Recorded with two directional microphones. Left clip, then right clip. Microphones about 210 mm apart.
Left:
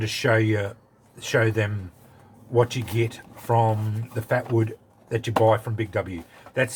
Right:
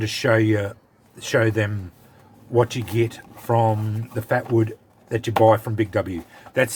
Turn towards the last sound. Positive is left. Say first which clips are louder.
# right 4 dB
turn(degrees=-45)  # may be behind; listen again after turning